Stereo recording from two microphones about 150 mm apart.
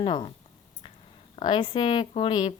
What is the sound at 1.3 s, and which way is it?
A woman's voice, 35° left (ahead or behind).